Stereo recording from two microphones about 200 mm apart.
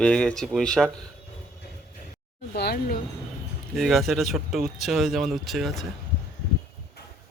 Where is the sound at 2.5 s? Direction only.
55° left (ahead or behind).